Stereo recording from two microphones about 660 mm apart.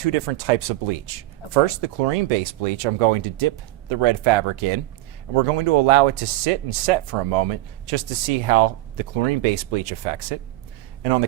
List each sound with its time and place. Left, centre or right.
0.0 s speech: right